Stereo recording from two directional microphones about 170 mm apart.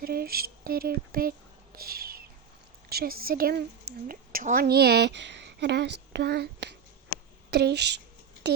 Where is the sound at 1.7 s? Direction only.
65° right (ahead or behind).